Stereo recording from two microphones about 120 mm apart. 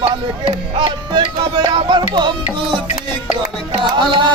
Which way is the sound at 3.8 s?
40° right (ahead or behind).